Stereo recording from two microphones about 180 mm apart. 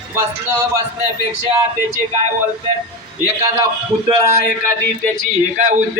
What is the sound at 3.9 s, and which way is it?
Speech, centre (ahead or behind).